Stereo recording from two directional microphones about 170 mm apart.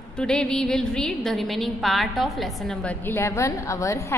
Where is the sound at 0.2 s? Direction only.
5° left (ahead or behind).